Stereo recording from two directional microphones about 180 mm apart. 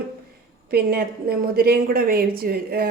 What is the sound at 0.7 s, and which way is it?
A woman's voice, 60° right (ahead or behind).